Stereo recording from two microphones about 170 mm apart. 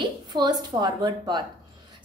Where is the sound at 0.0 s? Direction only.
25° right (ahead or behind).